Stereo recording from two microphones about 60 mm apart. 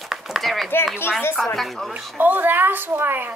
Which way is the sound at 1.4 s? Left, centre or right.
Centre.